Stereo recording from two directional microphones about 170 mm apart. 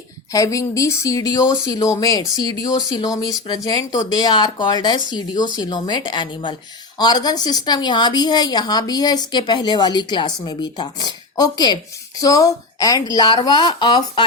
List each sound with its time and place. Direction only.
0.3 s speech: 20° left (ahead or behind)